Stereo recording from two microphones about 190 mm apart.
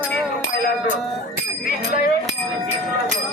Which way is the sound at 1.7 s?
50° left (ahead or behind).